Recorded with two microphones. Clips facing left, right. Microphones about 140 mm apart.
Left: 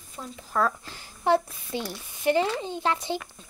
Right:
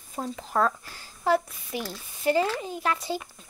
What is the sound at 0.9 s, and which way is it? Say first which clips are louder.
Speech: left 1 dB; 25° left (ahead or behind).